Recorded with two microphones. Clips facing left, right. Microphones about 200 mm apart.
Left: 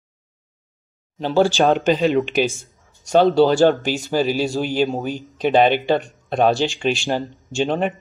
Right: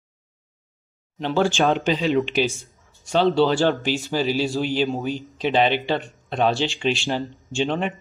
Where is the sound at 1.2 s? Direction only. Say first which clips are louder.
Left 4 dB; 35° left (ahead or behind).